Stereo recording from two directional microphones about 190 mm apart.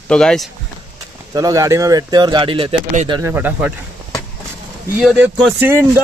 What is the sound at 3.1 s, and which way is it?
Speech, 10° right (ahead or behind).